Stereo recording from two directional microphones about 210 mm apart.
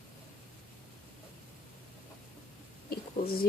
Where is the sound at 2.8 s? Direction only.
45° left (ahead or behind).